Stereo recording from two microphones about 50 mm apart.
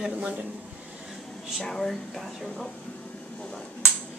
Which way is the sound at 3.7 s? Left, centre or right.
Left.